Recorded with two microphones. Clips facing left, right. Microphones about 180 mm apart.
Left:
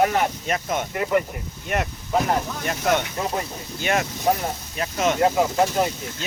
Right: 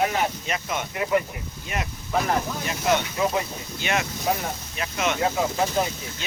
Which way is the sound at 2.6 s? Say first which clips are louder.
Left 2 dB; 50° left (ahead or behind).